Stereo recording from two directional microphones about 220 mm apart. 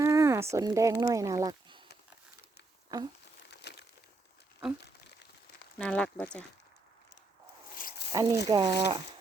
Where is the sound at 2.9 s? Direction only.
15° right (ahead or behind).